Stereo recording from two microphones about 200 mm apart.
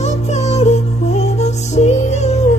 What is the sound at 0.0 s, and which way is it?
Music, 35° left (ahead or behind).